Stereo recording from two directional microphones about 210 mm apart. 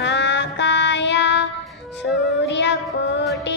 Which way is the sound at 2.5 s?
55° left (ahead or behind).